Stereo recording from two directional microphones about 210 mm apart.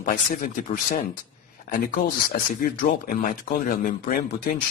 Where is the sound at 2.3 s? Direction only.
40° left (ahead or behind).